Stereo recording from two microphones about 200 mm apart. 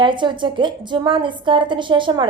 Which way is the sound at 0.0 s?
25° right (ahead or behind).